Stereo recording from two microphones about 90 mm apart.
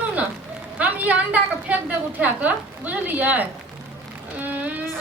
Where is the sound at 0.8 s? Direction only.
20° right (ahead or behind).